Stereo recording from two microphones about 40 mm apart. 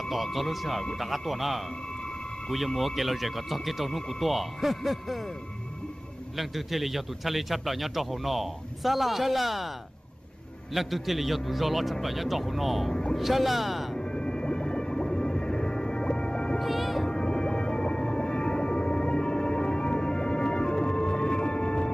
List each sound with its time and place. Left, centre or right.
0.1 s a man's voice: centre
6.3 s a man's voice: centre
10.7 s a man's voice: centre
13.9 s music: centre
16.5 s music: centre
17.1 s music: centre